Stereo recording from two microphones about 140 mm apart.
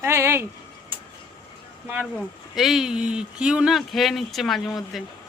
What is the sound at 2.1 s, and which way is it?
Speech, centre (ahead or behind).